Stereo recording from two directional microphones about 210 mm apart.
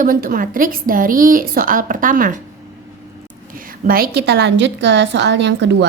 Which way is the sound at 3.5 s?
45° right (ahead or behind).